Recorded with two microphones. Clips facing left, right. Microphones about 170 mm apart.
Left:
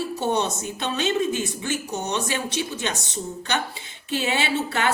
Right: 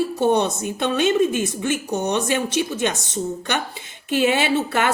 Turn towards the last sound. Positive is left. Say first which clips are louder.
# right 4 dB
turn(degrees=-55)  # may be behind; listen again after turning